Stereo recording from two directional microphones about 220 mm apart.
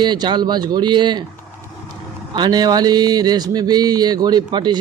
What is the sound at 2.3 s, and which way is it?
Speech, 20° right (ahead or behind).